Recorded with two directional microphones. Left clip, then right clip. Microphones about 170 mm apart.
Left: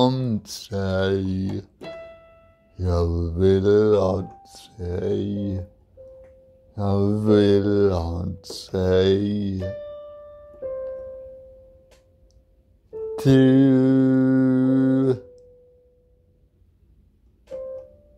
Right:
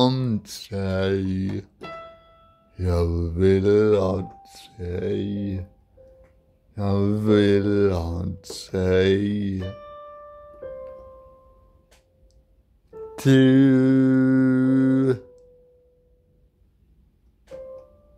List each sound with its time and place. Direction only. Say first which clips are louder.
0.0 s speech: left 1 dB; 20° right (ahead or behind)
0.4 s speech: left 2 dB; 5° right (ahead or behind)
2.7 s speech: even; 15° right (ahead or behind)
6.7 s speech: left 1 dB; 15° right (ahead or behind)
13.1 s music: even; 10° right (ahead or behind)